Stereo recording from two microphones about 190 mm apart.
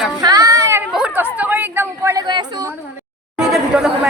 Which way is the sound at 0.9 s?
5° right (ahead or behind).